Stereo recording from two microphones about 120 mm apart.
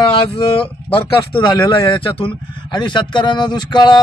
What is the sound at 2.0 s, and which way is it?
Speech, 50° left (ahead or behind).